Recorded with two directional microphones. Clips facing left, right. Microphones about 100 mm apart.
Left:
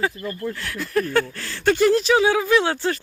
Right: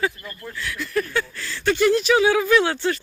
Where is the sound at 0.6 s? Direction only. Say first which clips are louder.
Right 1 dB; 40° left (ahead or behind).